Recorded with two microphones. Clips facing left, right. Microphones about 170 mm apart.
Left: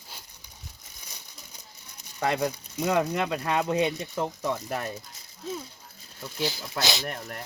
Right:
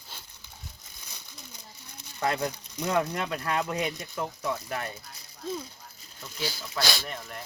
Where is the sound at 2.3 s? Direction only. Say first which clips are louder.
Left 3 dB; 10° left (ahead or behind); by 4.9 s 35° left (ahead or behind).